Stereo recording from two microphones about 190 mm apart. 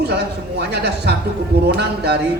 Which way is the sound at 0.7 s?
60° right (ahead or behind).